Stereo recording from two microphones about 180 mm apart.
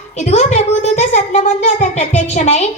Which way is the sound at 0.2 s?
40° left (ahead or behind).